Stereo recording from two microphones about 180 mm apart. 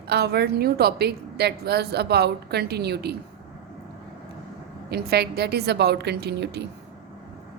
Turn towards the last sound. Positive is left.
turn(degrees=-70)  # may be behind; listen again after turning